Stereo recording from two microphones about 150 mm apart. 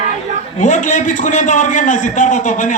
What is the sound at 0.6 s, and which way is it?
A man's voice, 55° left (ahead or behind).